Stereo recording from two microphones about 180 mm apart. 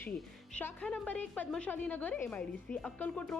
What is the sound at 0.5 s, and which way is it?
A woman's voice, 10° left (ahead or behind).